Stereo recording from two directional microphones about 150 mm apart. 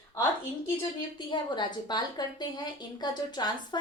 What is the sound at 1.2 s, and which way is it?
A woman's voice, 30° left (ahead or behind).